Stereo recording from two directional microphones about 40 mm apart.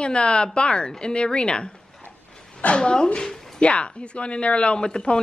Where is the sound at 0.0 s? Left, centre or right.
Left.